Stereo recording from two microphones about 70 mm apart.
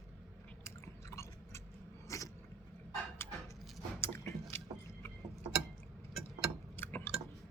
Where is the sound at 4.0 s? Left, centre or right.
Left.